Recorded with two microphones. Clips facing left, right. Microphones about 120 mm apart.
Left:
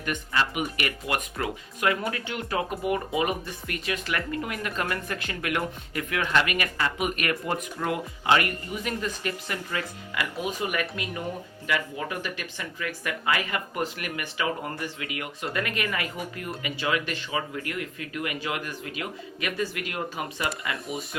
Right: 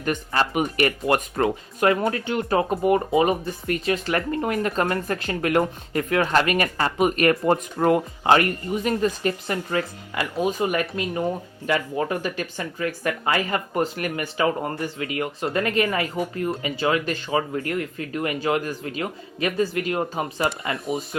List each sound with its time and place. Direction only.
0.0 s speech: 40° right (ahead or behind)